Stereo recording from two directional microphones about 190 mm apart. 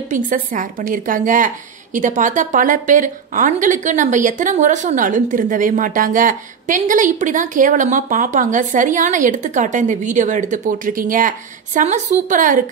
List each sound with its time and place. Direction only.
0.1 s a woman's voice: 45° right (ahead or behind)